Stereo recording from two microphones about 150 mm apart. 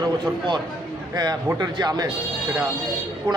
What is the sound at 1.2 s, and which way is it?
Speech, 25° right (ahead or behind).